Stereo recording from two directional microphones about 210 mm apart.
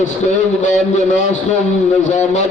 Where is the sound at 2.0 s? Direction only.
35° left (ahead or behind).